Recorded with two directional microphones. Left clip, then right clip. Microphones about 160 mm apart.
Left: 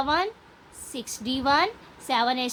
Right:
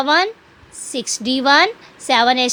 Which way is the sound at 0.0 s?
50° right (ahead or behind).